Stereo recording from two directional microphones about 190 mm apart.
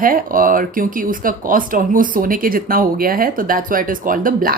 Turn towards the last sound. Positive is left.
turn(degrees=-45)  # may be behind; listen again after turning